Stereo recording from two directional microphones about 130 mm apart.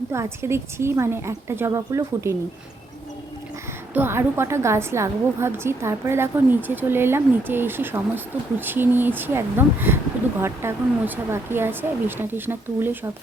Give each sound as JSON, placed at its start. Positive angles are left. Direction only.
{"t": 0.1, "sound": "a woman's voice", "side_deg": -20}
{"t": 3.9, "sound": "a woman's voice", "side_deg": -15}